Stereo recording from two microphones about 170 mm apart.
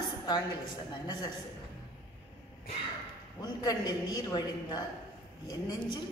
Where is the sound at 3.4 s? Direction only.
25° left (ahead or behind).